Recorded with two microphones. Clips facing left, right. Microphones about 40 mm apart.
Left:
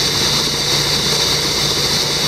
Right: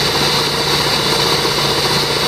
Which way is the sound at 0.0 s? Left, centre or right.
Centre.